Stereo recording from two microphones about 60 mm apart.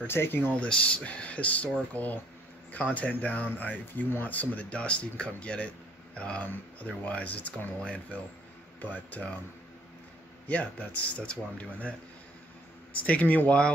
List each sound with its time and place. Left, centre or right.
0.0 s speech: left
0.6 s speech: left
10.5 s speech: left
13.0 s speech: left